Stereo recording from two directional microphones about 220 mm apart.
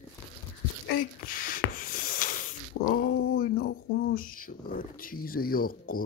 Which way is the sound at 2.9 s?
40° left (ahead or behind).